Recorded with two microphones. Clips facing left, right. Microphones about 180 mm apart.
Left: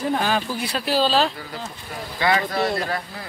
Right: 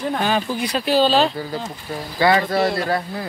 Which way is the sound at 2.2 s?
35° right (ahead or behind).